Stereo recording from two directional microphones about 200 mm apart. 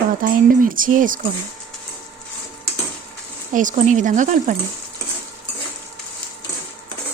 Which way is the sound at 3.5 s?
40° right (ahead or behind).